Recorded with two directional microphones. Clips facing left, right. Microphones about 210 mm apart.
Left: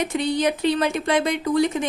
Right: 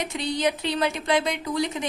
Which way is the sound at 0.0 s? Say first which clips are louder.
Left 4 dB; 50° left (ahead or behind).